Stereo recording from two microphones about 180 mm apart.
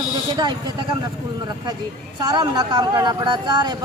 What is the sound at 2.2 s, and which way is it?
Speech, 25° right (ahead or behind).